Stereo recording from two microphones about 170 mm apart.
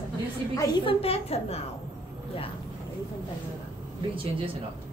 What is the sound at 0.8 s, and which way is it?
Speech, 35° left (ahead or behind).